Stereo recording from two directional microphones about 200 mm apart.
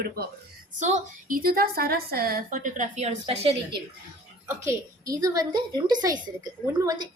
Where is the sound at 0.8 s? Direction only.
35° right (ahead or behind).